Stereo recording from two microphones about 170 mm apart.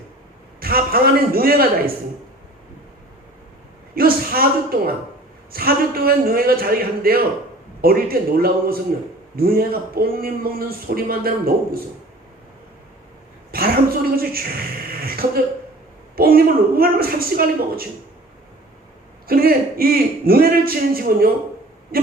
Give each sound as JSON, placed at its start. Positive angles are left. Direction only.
{"t": 0.6, "sound": "a man's voice", "side_deg": -60}
{"t": 3.9, "sound": "a man's voice", "side_deg": -60}
{"t": 13.5, "sound": "a man's voice", "side_deg": -60}
{"t": 19.3, "sound": "a man's voice", "side_deg": -60}
{"t": 21.9, "sound": "owl", "side_deg": -60}